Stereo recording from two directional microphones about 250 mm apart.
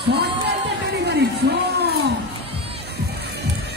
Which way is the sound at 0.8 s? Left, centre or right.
Right.